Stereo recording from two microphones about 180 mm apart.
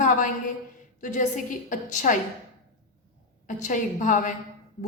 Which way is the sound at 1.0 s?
45° left (ahead or behind).